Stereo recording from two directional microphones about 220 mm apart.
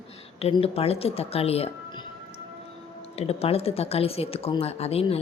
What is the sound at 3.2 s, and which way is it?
Speech, 30° left (ahead or behind).